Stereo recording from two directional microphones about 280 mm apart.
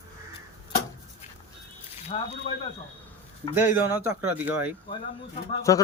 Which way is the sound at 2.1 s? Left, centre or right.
Left.